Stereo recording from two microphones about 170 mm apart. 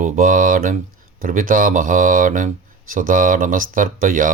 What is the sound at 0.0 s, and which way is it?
Speech, 50° right (ahead or behind).